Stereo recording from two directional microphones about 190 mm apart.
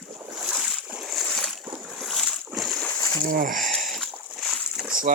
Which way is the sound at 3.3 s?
45° right (ahead or behind).